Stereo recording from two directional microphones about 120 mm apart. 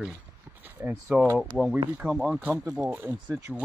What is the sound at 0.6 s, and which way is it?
Speech, 15° right (ahead or behind).